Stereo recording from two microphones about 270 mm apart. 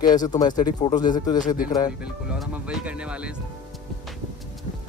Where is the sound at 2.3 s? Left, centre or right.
Centre.